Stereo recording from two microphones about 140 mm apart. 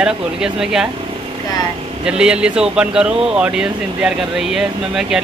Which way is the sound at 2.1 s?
5° right (ahead or behind).